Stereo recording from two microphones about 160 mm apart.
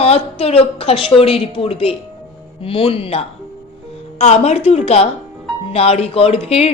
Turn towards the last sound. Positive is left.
turn(degrees=40)  # may be behind; listen again after turning